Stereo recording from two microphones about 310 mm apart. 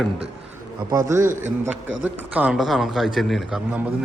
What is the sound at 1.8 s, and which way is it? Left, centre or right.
Speech, right.